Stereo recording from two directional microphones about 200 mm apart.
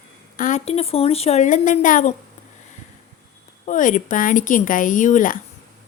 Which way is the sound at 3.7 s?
40° left (ahead or behind).